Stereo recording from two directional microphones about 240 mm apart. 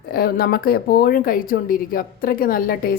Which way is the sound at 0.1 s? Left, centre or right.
Left.